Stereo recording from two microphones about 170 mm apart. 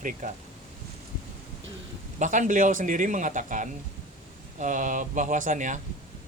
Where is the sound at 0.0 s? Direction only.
50° right (ahead or behind).